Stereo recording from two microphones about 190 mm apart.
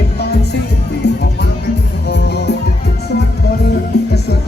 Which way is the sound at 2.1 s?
60° left (ahead or behind).